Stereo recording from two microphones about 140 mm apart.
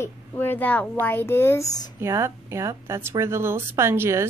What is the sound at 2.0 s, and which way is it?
Speech, 20° right (ahead or behind).